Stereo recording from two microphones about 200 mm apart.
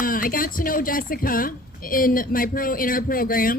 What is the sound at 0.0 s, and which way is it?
A woman's voice, 45° left (ahead or behind).